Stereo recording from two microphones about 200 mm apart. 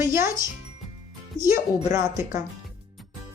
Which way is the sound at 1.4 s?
15° right (ahead or behind).